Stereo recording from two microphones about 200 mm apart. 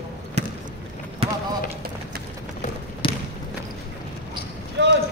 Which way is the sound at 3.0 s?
25° left (ahead or behind).